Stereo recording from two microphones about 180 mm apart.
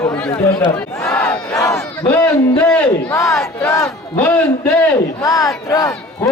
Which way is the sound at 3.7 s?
20° left (ahead or behind).